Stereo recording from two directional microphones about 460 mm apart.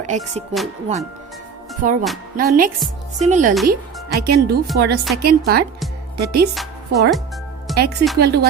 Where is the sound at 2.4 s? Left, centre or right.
Centre.